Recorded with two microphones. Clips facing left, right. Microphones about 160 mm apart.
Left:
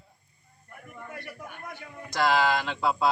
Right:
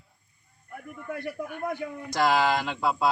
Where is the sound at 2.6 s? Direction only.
5° right (ahead or behind).